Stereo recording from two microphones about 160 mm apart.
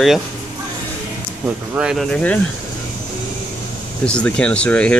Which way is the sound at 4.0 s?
5° left (ahead or behind).